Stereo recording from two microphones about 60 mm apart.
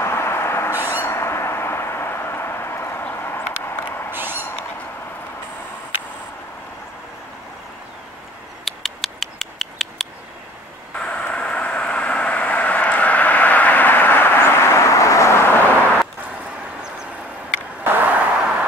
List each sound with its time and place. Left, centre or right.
0.0 s owl: left
3.2 s vehicle: left
4.1 s a sound: right
8.6 s a sound: centre
11.0 s vehicle: centre; by 16.0 s left
17.8 s vehicle: right